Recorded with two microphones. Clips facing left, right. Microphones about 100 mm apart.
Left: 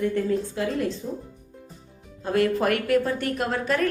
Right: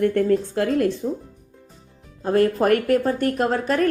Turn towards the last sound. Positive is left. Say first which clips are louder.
# right 4 dB
turn(degrees=-40)  # may be behind; listen again after turning